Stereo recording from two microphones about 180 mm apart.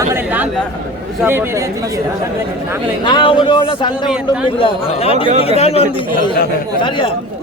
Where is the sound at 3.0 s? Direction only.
25° left (ahead or behind).